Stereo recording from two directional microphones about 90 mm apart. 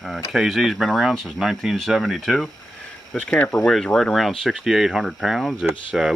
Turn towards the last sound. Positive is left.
turn(degrees=-5)  # may be behind; listen again after turning